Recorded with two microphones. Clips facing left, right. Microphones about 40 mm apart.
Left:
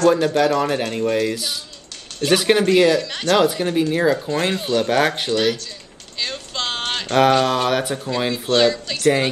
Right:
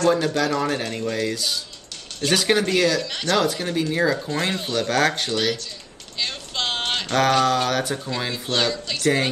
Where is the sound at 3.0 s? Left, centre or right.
Left.